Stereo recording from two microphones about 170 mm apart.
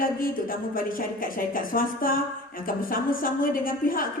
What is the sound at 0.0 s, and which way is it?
A woman's voice, 55° left (ahead or behind).